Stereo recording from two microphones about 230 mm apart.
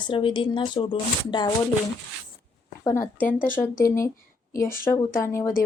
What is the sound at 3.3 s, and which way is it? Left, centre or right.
Speech, left.